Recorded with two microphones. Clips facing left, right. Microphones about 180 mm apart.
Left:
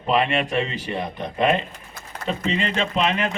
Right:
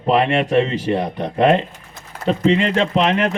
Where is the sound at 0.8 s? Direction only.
65° right (ahead or behind).